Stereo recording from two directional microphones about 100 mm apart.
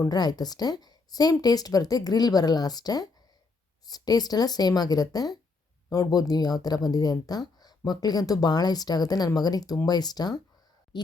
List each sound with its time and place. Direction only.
0.0 s speech: 40° left (ahead or behind)